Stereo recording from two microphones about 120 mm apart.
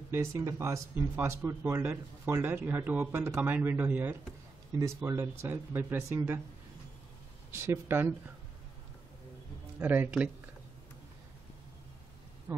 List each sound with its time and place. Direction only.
0.1 s speech: 25° right (ahead or behind)
7.5 s speech: 20° right (ahead or behind)
9.8 s speech: 15° right (ahead or behind)
12.5 s speech: 20° right (ahead or behind)